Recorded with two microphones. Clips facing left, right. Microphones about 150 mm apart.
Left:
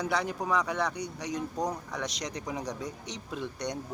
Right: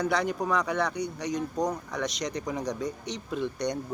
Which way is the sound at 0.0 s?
10° left (ahead or behind).